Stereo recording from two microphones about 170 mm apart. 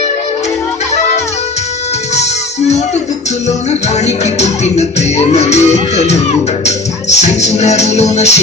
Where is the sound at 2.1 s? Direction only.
40° left (ahead or behind).